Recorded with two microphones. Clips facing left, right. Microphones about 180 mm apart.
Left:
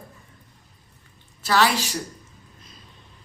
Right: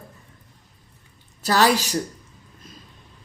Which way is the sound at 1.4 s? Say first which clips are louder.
Right 2 dB; 40° right (ahead or behind).